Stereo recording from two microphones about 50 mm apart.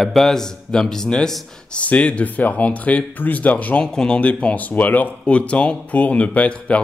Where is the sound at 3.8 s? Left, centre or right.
Centre.